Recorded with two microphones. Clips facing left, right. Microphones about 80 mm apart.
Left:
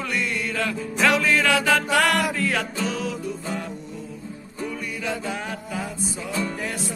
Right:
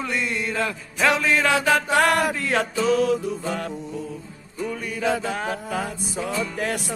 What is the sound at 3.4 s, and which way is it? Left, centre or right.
Music, right.